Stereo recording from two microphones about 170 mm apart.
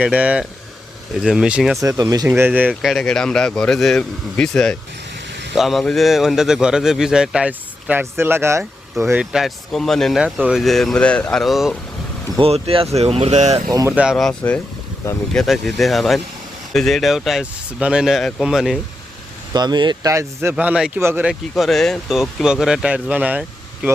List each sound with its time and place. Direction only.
0.0 s a man's voice: 10° right (ahead or behind)
1.8 s a man's voice: 20° right (ahead or behind)
9.3 s a man's voice: centre (ahead or behind)
12.4 s speech: 35° right (ahead or behind)
13.7 s speech: 20° right (ahead or behind)
13.9 s a man's voice: 5° right (ahead or behind)
19.5 s speech: 25° right (ahead or behind)
21.5 s a man's voice: centre (ahead or behind)